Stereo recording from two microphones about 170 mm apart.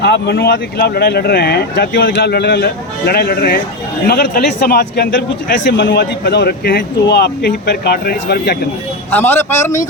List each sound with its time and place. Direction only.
0.0 s speech: 85° left; by 8.5 s 65° left (ahead or behind)
9.1 s a man's voice: 10° left (ahead or behind)